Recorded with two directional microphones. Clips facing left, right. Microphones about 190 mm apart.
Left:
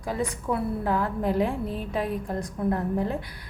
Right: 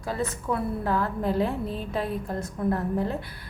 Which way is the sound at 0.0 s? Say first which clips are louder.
Left 1 dB; 15° left (ahead or behind).